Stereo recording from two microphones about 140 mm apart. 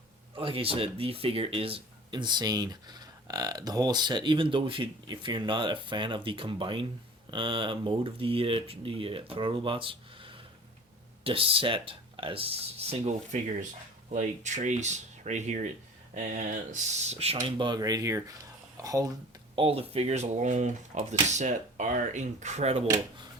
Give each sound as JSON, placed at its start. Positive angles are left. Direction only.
{"t": 0.3, "sound": "speech", "side_deg": -40}
{"t": 16.7, "sound": "speech", "side_deg": -50}
{"t": 17.6, "sound": "speech", "side_deg": -30}
{"t": 19.5, "sound": "speech", "side_deg": -45}